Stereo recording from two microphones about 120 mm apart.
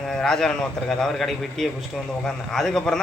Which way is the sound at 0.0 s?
5° left (ahead or behind).